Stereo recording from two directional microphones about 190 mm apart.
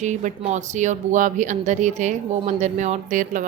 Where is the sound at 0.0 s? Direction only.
40° right (ahead or behind).